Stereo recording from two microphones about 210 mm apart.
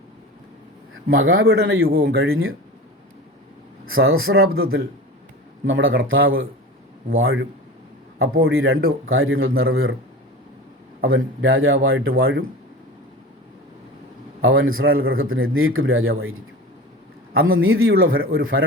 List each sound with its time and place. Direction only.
1.1 s a man's voice: 75° right (ahead or behind)
1.9 s speech: 45° right (ahead or behind)
2.1 s a man's voice: 75° right (ahead or behind)
3.8 s a man's voice: 75° right (ahead or behind)
5.6 s a man's voice: 65° right (ahead or behind)
11.0 s a man's voice: 70° right (ahead or behind)
14.4 s a man's voice: 70° right (ahead or behind)
17.5 s a man's voice: 75° right (ahead or behind)